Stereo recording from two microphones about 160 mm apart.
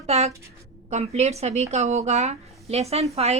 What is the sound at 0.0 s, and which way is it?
A woman's voice, 40° right (ahead or behind).